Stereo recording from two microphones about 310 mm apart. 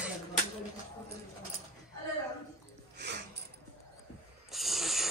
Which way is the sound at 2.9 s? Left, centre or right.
Right.